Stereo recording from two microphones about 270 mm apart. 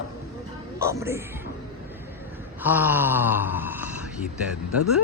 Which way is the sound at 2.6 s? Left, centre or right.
Centre.